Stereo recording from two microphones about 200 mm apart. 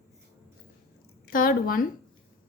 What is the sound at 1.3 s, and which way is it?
Speech, 45° left (ahead or behind).